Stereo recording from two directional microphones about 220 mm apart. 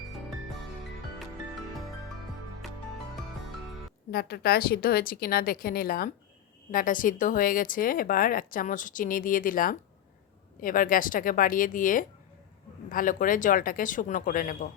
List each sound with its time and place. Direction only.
4.1 s a woman's voice: 45° left (ahead or behind)